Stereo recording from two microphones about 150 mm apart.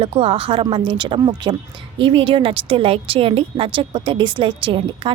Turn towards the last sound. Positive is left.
turn(degrees=-35)  # may be behind; listen again after turning